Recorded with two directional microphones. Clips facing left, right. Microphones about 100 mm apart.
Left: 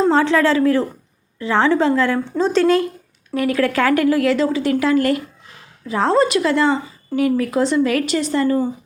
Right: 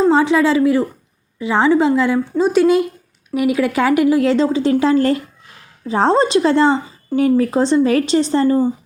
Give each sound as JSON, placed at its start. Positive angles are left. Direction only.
{"t": 0.1, "sound": "speech", "side_deg": -15}